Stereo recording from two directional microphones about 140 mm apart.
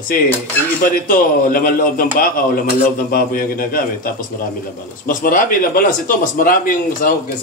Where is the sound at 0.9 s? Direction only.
85° left.